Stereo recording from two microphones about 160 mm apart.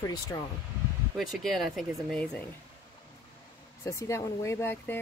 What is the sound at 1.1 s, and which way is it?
Speech, centre (ahead or behind).